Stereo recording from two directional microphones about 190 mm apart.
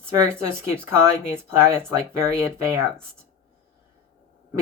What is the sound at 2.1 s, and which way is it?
Speech, 15° right (ahead or behind).